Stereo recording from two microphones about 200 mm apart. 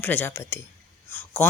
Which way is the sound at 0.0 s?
10° left (ahead or behind).